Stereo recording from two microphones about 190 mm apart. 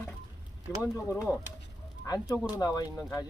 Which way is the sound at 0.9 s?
15° left (ahead or behind).